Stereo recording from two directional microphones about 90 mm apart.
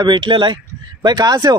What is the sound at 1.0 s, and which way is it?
Speech, 50° right (ahead or behind).